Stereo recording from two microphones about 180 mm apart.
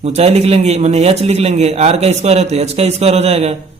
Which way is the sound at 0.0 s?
35° right (ahead or behind).